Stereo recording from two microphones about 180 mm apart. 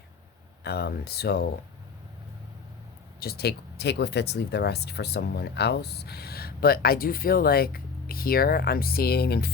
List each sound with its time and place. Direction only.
0.6 s speech: 65° left (ahead or behind)
3.2 s speech: 60° left (ahead or behind)